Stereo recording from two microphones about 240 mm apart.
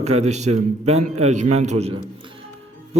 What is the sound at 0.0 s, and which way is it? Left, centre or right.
A man's voice, right.